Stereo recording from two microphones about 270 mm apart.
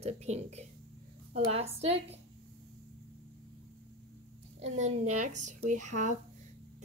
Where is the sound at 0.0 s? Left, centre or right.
Right.